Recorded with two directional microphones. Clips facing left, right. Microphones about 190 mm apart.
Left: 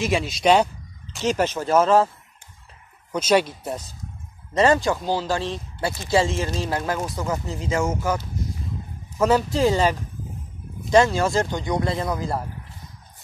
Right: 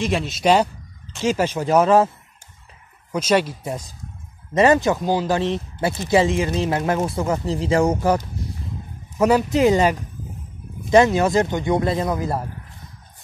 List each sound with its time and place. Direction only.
0.0 s speech: centre (ahead or behind); by 2.0 s 15° right (ahead or behind)
3.1 s speech: 10° right (ahead or behind)
4.6 s speech: 20° right (ahead or behind)
9.2 s speech: 15° right (ahead or behind)